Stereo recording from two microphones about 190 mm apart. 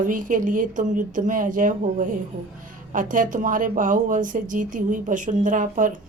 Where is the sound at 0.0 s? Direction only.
45° right (ahead or behind).